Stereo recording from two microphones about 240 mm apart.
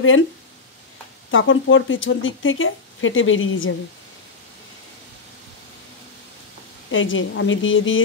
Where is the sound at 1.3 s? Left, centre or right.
Left.